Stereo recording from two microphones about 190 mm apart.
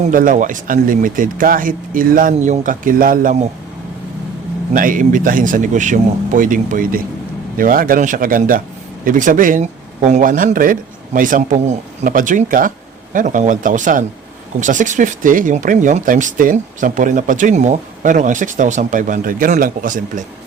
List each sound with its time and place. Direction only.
0.1 s speech: 45° right (ahead or behind)
4.7 s speech: 45° right (ahead or behind)